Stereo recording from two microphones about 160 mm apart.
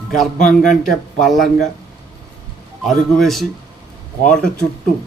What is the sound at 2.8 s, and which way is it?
Speech, centre (ahead or behind).